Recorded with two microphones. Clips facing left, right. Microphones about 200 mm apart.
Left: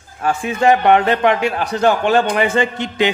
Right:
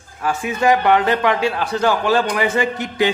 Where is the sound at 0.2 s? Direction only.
30° left (ahead or behind).